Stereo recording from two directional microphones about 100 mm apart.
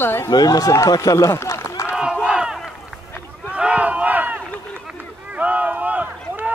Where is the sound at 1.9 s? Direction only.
10° right (ahead or behind).